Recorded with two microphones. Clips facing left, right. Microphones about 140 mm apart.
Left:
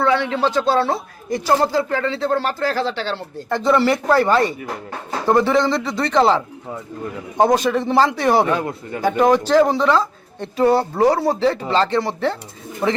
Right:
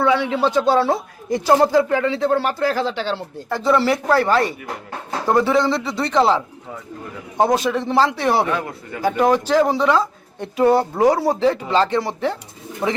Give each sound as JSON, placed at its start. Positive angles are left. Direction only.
{"t": 0.0, "sound": "a man's voice", "side_deg": -10}
{"t": 8.5, "sound": "a man's voice", "side_deg": 30}
{"t": 9.0, "sound": "a man's voice", "side_deg": -5}